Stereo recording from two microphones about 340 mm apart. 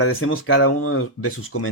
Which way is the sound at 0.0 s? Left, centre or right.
Left.